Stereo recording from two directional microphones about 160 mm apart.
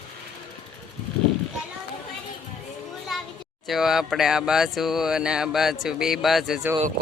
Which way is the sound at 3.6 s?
Centre (ahead or behind).